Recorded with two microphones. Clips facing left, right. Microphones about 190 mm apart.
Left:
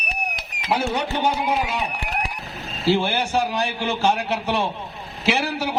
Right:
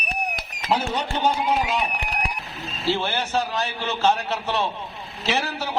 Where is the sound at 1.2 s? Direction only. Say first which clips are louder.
Right 2 dB; 10° left (ahead or behind).